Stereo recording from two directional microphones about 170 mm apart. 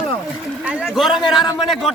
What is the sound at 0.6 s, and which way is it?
Speech, 5° right (ahead or behind).